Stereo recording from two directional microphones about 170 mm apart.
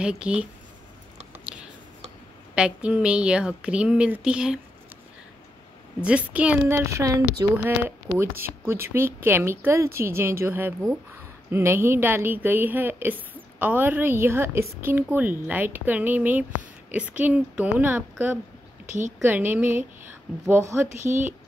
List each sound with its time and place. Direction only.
0.0 s a woman's voice: 5° right (ahead or behind)
2.5 s speech: 5° right (ahead or behind)
6.0 s a woman's voice: 5° right (ahead or behind)
18.9 s a woman's voice: 45° right (ahead or behind)
19.2 s a woman's voice: 10° right (ahead or behind)
21.0 s a woman's voice: 45° right (ahead or behind)